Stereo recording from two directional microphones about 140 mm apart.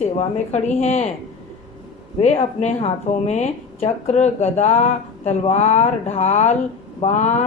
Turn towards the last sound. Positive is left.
turn(degrees=55)  # may be behind; listen again after turning